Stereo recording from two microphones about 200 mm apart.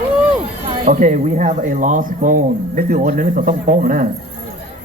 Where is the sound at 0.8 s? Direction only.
40° right (ahead or behind).